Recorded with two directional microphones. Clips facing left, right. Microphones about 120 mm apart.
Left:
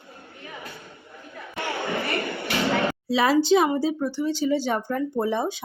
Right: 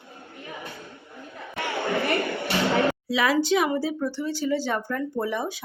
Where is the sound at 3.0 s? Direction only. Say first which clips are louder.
Left 3 dB; 30° left (ahead or behind).